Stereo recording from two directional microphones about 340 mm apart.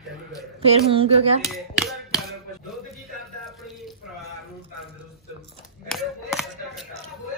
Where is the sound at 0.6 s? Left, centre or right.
Centre.